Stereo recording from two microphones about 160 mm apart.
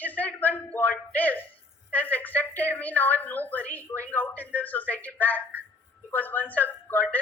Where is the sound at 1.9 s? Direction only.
10° left (ahead or behind).